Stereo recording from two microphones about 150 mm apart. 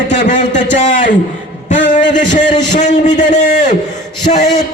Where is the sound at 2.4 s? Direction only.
30° left (ahead or behind).